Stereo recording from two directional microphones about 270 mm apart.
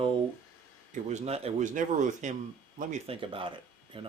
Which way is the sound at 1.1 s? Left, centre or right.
Right.